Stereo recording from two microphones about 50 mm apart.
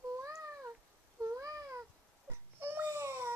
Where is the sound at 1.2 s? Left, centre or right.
Right.